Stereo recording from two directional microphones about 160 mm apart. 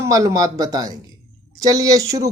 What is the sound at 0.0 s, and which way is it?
Speech, 20° right (ahead or behind).